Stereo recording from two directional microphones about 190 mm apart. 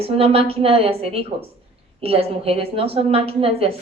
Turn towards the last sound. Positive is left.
turn(degrees=-30)  # may be behind; listen again after turning